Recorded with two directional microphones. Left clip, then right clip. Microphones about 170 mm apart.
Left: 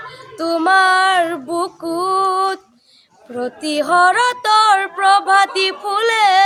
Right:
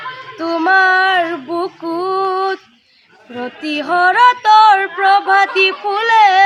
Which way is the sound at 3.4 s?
30° left (ahead or behind).